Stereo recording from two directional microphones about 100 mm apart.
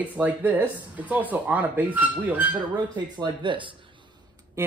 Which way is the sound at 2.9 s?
45° right (ahead or behind).